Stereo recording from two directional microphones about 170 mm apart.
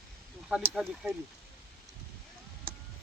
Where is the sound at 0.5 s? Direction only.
5° right (ahead or behind).